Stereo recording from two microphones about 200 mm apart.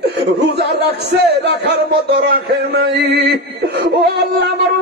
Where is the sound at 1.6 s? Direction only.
60° right (ahead or behind).